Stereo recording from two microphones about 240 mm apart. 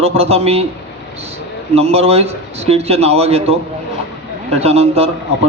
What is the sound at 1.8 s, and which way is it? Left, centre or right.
A man's voice, right.